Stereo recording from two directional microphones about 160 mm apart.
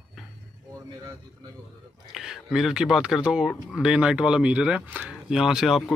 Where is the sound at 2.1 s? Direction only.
Centre (ahead or behind).